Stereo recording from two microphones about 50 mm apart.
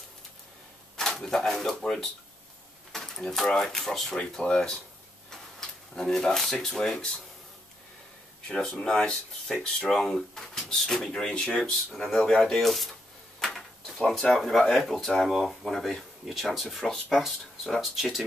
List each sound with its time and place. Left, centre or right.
0.9 s speech: centre
4.2 s speech: centre
8.7 s speech: centre
13.4 s drawer open or close: centre
14.3 s speech: centre